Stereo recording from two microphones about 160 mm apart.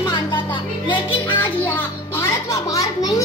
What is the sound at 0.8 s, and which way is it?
Music, 30° left (ahead or behind).